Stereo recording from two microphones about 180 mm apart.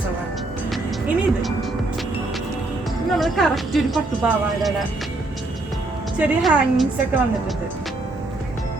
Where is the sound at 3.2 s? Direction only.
Centre (ahead or behind).